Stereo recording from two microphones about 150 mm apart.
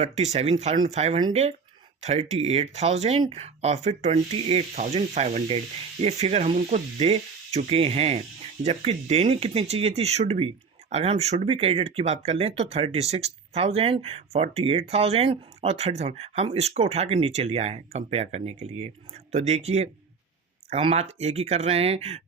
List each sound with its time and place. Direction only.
0.0 s speech: 45° right (ahead or behind)